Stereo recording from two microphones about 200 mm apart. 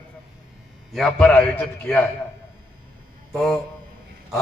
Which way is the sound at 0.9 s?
Centre (ahead or behind).